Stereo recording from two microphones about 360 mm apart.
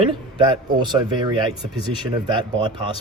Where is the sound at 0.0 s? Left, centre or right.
Centre.